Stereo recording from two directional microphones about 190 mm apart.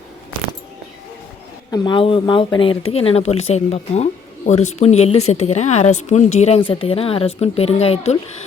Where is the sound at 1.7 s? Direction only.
25° left (ahead or behind).